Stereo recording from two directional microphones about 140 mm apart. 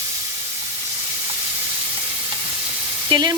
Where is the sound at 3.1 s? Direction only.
30° right (ahead or behind).